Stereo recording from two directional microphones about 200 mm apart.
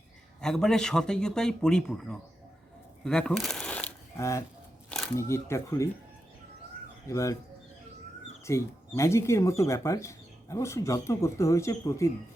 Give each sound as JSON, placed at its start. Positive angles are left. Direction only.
{"t": 0.4, "sound": "speech", "side_deg": 5}
{"t": 3.0, "sound": "shuffling cards", "side_deg": 5}
{"t": 5.1, "sound": "speech", "side_deg": 15}
{"t": 7.1, "sound": "speech", "side_deg": 15}
{"t": 8.4, "sound": "speech", "side_deg": 15}